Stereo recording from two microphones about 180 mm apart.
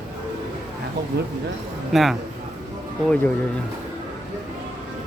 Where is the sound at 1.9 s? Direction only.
Centre (ahead or behind).